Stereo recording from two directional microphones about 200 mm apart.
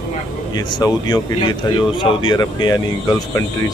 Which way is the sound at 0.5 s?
20° left (ahead or behind).